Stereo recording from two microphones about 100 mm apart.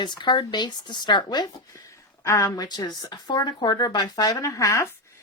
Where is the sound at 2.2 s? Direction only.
30° left (ahead or behind).